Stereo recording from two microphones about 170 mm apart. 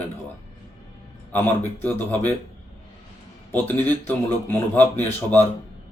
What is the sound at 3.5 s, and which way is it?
A man's voice, 10° left (ahead or behind).